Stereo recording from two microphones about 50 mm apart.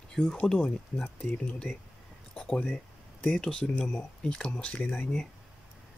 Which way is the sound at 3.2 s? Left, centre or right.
Centre.